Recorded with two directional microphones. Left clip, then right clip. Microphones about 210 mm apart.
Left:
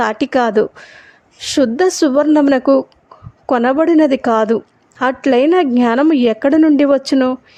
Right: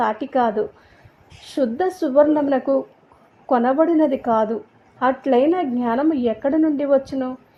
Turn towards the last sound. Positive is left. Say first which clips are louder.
# left 6 dB
turn(degrees=35)  # may be behind; listen again after turning